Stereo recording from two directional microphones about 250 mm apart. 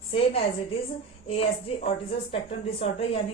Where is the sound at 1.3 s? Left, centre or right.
Left.